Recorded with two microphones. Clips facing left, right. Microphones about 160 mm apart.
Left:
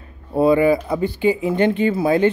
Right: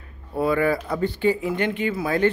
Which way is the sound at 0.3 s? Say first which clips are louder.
Left 7 dB; 25° left (ahead or behind).